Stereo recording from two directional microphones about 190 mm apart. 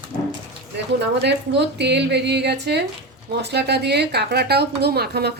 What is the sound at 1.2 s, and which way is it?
A woman's voice, 65° right (ahead or behind).